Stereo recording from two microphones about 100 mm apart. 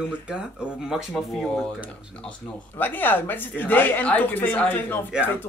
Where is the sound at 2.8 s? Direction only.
20° left (ahead or behind).